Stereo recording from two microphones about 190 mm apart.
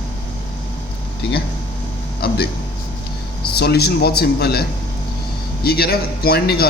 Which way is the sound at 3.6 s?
60° left (ahead or behind).